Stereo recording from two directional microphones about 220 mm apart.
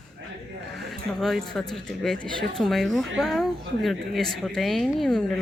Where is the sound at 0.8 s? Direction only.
Centre (ahead or behind).